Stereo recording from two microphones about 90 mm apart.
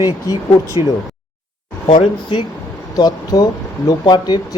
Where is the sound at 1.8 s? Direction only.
70° left (ahead or behind).